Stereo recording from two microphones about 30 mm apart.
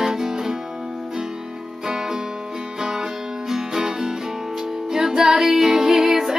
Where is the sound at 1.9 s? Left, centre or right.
Centre.